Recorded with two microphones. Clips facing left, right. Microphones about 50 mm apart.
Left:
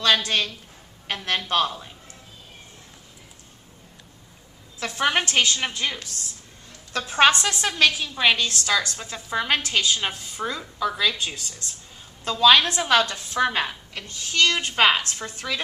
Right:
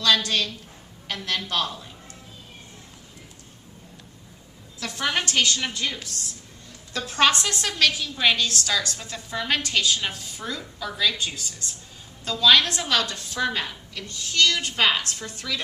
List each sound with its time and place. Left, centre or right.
0.0 s a woman's voice: left
4.8 s a woman's voice: left
7.0 s a woman's voice: left; by 11.4 s centre
12.2 s a woman's voice: centre
12.9 s a woman's voice: left